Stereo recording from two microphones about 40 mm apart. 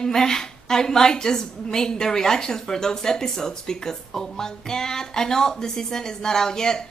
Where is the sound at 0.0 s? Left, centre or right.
Centre.